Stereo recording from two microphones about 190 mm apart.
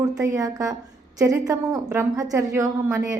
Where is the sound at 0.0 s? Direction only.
20° right (ahead or behind).